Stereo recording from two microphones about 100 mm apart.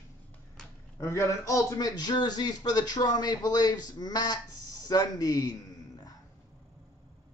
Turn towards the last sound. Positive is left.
turn(degrees=40)  # may be behind; listen again after turning